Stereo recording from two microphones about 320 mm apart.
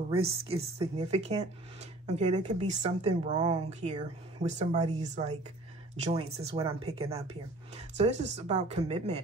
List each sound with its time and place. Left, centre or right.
0.1 s speech: centre